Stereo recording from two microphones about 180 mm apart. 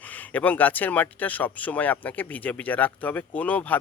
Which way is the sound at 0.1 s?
10° left (ahead or behind).